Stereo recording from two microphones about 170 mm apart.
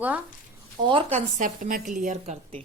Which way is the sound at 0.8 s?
30° right (ahead or behind).